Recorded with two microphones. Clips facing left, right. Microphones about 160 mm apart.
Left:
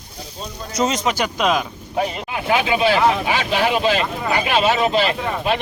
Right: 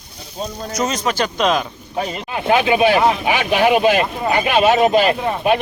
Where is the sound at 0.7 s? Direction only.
25° left (ahead or behind); by 1.6 s 5° left (ahead or behind).